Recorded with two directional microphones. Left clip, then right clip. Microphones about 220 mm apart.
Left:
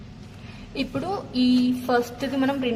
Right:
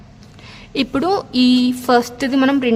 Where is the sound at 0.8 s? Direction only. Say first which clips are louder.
Right 10 dB; 45° right (ahead or behind).